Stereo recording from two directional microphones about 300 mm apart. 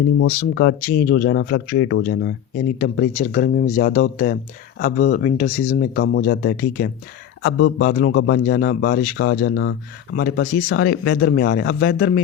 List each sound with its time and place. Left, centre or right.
0.3 s speech: left